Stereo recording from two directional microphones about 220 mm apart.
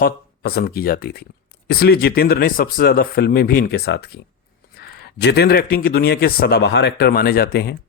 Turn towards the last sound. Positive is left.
turn(degrees=45)  # may be behind; listen again after turning